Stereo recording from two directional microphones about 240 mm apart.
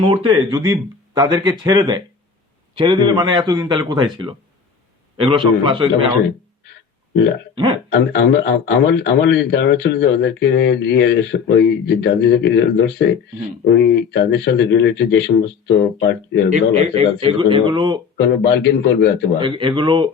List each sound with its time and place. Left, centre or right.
0.0 s a man's voice: centre
7.5 s speech: centre
7.9 s a man's voice: left
16.5 s a man's voice: right
18.2 s a man's voice: left
19.4 s a man's voice: right